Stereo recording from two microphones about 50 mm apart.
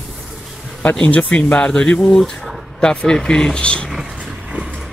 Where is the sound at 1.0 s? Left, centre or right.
Left.